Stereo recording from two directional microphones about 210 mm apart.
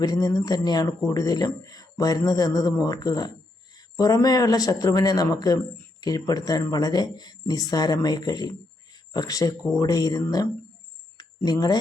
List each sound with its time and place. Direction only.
0.0 s a man's voice: 20° left (ahead or behind)